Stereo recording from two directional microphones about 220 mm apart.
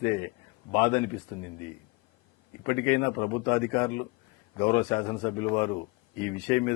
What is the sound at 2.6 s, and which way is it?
Speech, 10° left (ahead or behind).